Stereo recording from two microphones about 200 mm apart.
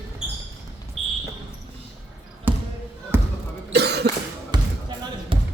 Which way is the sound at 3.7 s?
55° right (ahead or behind).